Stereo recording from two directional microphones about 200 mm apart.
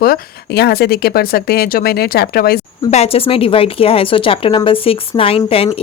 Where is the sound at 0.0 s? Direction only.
50° left (ahead or behind).